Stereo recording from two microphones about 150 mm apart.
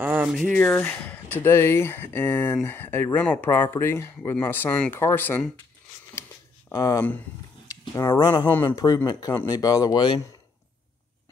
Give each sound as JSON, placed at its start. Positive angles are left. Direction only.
{"t": 0.0, "sound": "a sound", "side_deg": -10}
{"t": 0.5, "sound": "speech", "side_deg": 5}
{"t": 6.7, "sound": "speech", "side_deg": 25}